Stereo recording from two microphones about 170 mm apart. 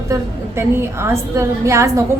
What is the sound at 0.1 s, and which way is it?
A woman's voice, 15° right (ahead or behind).